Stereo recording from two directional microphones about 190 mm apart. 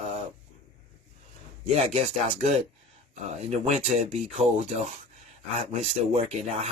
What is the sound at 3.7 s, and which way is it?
Speech, 35° right (ahead or behind).